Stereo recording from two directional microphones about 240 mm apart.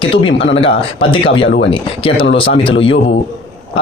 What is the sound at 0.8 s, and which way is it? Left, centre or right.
Speech, left.